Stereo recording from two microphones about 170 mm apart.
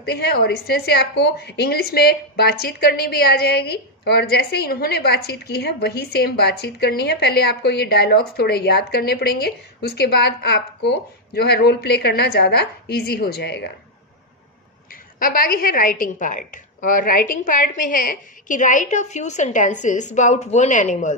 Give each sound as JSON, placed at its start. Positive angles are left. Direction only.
{"t": 0.0, "sound": "a woman's voice", "side_deg": 70}
{"t": 15.1, "sound": "a woman's voice", "side_deg": 55}